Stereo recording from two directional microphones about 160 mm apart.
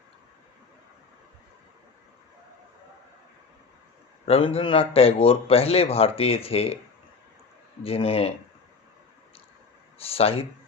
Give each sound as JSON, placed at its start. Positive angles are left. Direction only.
{"t": 4.3, "sound": "speech", "side_deg": 35}
{"t": 7.9, "sound": "speech", "side_deg": 35}
{"t": 10.0, "sound": "speech", "side_deg": 40}